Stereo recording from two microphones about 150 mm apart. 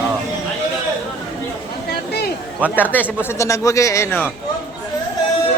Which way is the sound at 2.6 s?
10° left (ahead or behind).